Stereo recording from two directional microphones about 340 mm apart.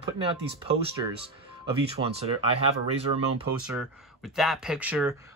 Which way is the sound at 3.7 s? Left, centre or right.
Centre.